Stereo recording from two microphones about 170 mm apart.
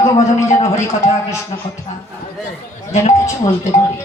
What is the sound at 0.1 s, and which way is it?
Speech, 15° left (ahead or behind).